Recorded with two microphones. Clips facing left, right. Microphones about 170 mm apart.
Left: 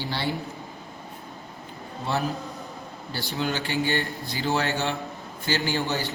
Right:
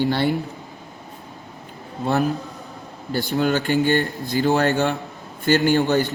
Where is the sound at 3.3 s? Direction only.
60° right (ahead or behind).